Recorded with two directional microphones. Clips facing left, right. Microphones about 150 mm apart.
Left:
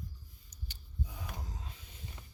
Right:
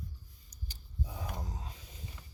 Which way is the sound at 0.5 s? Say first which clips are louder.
Right 1 dB; 40° right (ahead or behind).